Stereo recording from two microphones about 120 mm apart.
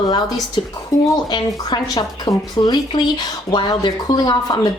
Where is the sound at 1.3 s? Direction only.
35° left (ahead or behind).